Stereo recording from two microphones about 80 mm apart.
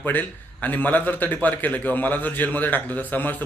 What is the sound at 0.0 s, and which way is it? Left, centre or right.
A man's voice, left.